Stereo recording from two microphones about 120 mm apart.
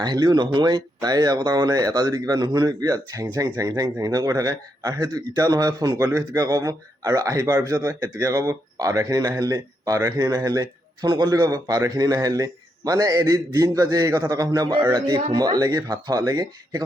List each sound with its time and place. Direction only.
0.0 s a man's voice: 35° right (ahead or behind)